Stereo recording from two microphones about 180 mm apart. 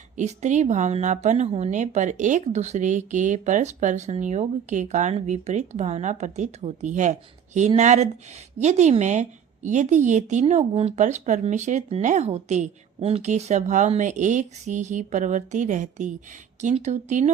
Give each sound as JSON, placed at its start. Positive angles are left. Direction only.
{"t": 0.2, "sound": "a woman's voice", "side_deg": -40}